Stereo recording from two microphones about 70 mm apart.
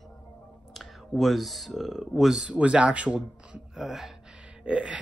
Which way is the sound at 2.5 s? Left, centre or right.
Centre.